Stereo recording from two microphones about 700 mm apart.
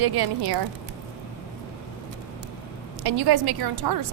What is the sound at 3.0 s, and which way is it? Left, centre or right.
Speech, right.